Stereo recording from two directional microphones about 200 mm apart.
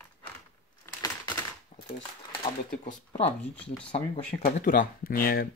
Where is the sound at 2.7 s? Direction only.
40° left (ahead or behind).